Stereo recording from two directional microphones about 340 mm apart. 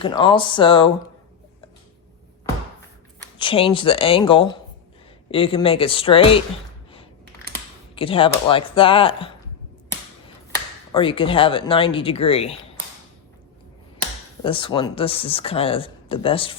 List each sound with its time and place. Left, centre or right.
0.0 s speech: centre
3.3 s speech: centre
7.9 s speech: centre
10.5 s speech: centre
14.4 s speech: centre